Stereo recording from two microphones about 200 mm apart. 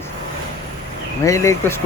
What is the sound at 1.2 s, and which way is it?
Speech, 15° left (ahead or behind).